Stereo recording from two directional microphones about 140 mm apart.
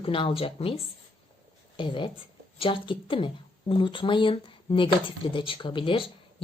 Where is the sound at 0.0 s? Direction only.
40° left (ahead or behind).